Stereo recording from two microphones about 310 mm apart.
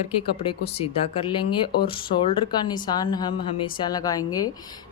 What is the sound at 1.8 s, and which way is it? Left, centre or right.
A woman's voice, centre.